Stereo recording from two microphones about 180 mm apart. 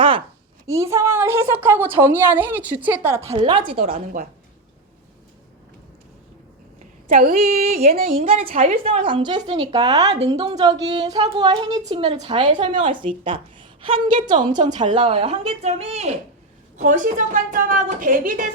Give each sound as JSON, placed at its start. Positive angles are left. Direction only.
{"t": 0.7, "sound": "a woman's voice", "side_deg": -15}
{"t": 3.9, "sound": "a woman's voice", "side_deg": -50}
{"t": 6.7, "sound": "a woman's voice", "side_deg": -45}
{"t": 9.0, "sound": "a woman's voice", "side_deg": -25}